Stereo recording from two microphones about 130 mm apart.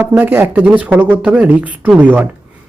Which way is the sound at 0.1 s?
15° right (ahead or behind).